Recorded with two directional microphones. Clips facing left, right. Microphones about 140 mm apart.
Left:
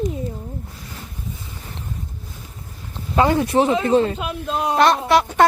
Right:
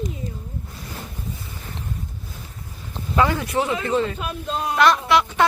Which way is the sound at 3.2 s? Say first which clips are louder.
Left 4 dB; 25° left (ahead or behind).